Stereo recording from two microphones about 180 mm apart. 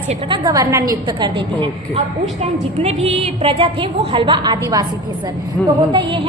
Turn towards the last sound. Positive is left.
turn(degrees=5)  # may be behind; listen again after turning